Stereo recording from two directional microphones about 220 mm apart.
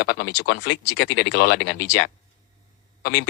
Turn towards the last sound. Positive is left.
turn(degrees=50)  # may be behind; listen again after turning